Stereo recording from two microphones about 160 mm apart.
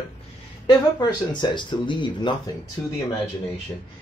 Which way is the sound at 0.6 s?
30° left (ahead or behind).